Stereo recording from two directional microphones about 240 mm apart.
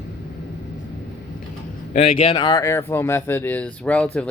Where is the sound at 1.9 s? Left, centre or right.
Left.